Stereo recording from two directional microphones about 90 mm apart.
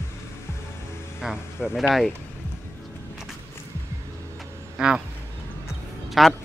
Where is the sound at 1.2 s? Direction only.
Centre (ahead or behind).